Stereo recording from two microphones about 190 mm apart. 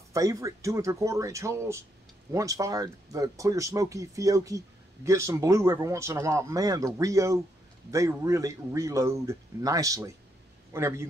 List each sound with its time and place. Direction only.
0.1 s speech: 20° right (ahead or behind)